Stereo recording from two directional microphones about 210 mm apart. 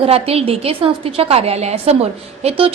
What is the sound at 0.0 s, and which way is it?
A woman's voice, 30° right (ahead or behind).